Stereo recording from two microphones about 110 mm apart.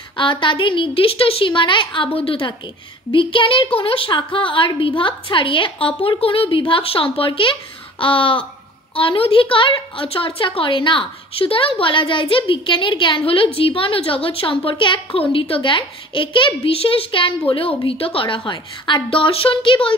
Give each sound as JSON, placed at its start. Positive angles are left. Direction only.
{"t": 0.1, "sound": "a woman's voice", "side_deg": 50}